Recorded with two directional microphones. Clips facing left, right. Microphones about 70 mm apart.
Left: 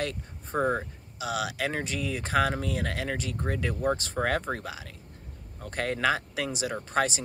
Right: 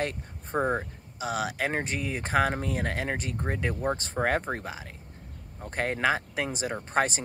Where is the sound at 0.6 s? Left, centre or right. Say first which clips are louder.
Even; centre.